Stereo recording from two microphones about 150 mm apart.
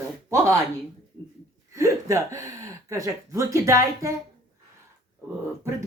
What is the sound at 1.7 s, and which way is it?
Speech, 20° right (ahead or behind).